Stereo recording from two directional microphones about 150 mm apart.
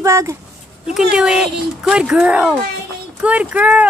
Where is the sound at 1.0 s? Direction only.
5° right (ahead or behind).